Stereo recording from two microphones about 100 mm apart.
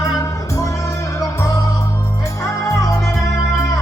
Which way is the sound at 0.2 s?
30° left (ahead or behind).